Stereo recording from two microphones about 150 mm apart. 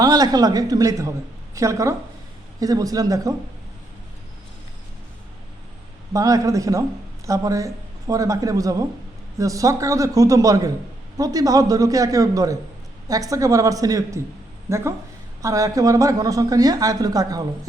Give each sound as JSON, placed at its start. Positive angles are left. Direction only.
{"t": 0.0, "sound": "a woman's voice", "side_deg": -25}
{"t": 6.1, "sound": "a woman's voice", "side_deg": -20}